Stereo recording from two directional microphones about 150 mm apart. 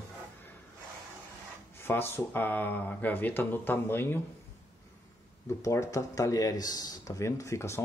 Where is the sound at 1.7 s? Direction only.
15° left (ahead or behind).